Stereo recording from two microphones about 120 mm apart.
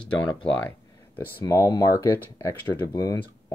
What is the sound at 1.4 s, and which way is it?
Speech, 30° left (ahead or behind).